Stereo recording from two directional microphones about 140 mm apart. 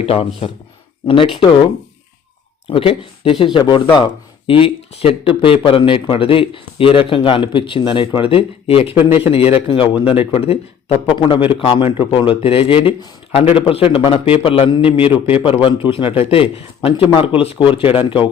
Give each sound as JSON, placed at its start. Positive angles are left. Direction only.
{"t": 0.0, "sound": "a man's voice", "side_deg": 45}
{"t": 2.6, "sound": "a man's voice", "side_deg": 40}